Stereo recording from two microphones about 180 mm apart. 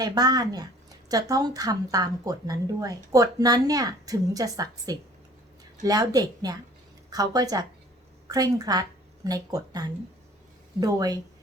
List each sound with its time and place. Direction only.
0.0 s speech: 20° right (ahead or behind)